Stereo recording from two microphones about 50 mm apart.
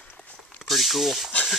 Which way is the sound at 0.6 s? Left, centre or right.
Centre.